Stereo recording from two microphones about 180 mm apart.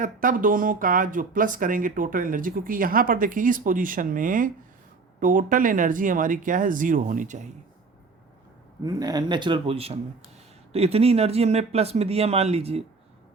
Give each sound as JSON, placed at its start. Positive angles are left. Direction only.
{"t": 0.0, "sound": "speech", "side_deg": -50}
{"t": 8.8, "sound": "speech", "side_deg": -20}